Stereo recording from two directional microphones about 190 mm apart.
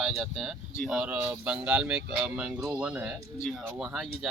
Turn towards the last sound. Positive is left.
turn(degrees=-5)  # may be behind; listen again after turning